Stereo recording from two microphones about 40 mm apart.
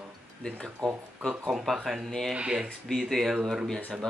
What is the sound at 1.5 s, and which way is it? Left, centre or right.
Speech, centre.